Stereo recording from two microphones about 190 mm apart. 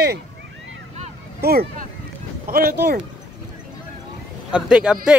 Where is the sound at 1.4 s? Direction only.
55° right (ahead or behind).